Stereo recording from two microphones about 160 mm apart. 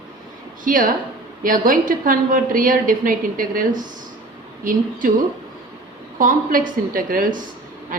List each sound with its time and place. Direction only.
0.6 s a woman's voice: 60° right (ahead or behind)
6.1 s a woman's voice: 60° right (ahead or behind)